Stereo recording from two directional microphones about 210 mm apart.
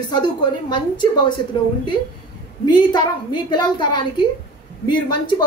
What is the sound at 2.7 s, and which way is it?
A woman's voice, 20° left (ahead or behind).